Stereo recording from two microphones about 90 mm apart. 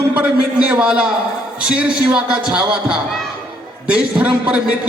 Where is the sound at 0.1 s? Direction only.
20° right (ahead or behind).